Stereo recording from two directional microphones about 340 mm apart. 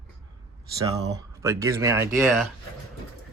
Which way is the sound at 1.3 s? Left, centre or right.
Centre.